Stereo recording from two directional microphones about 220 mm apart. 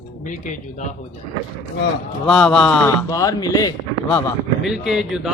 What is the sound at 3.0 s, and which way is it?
A man's voice, 15° left (ahead or behind).